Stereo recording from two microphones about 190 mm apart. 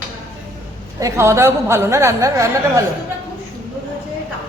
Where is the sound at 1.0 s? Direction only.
15° right (ahead or behind).